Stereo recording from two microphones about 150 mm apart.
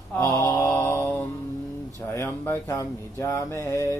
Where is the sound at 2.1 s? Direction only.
15° left (ahead or behind).